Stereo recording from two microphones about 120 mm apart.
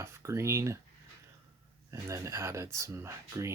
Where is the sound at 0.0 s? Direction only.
25° right (ahead or behind).